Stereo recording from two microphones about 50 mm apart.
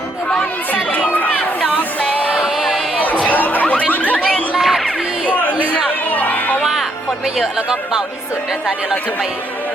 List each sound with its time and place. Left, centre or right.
0.7 s crowd: left
1.6 s music: left
2.4 s a sound: centre
3.2 s a sound: left
4.5 s music: centre
6.1 s music: left
7.3 s speech: centre